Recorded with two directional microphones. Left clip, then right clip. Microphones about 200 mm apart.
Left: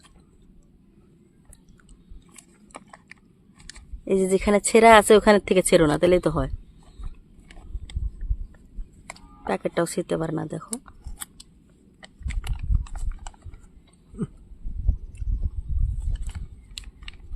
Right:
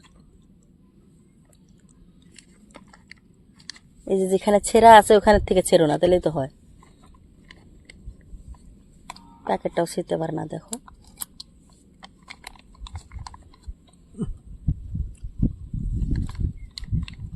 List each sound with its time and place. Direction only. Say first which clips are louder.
2.7 s biting: left 3 dB; 10° left (ahead or behind)
3.8 s speech: even; 15° left (ahead or behind)
9.0 s speech: right 2 dB; 10° left (ahead or behind)
11.9 s horse: even; 5° left (ahead or behind)